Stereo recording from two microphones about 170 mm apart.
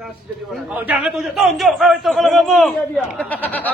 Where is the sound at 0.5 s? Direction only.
5° right (ahead or behind).